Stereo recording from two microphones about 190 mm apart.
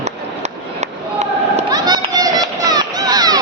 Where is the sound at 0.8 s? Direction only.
35° right (ahead or behind).